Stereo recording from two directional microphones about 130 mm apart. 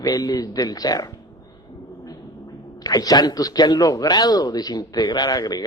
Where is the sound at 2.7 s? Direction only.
30° left (ahead or behind).